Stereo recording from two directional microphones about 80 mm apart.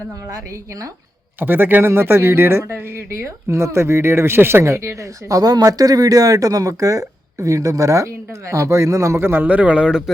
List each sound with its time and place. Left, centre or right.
1.4 s speech: right
5.4 s speech: right; by 10.0 s centre